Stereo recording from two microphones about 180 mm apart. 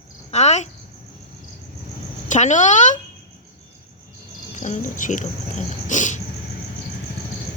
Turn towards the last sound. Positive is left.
turn(degrees=45)  # may be behind; listen again after turning